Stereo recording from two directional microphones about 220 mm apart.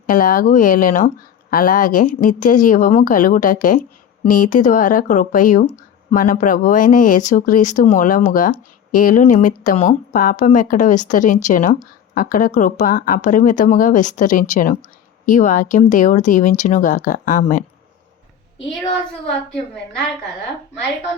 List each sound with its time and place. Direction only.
0.1 s speech: 40° left (ahead or behind)